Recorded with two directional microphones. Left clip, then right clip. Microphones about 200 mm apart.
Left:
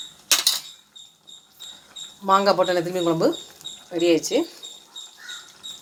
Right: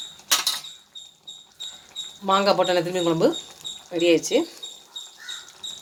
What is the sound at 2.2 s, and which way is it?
Speech, 5° left (ahead or behind).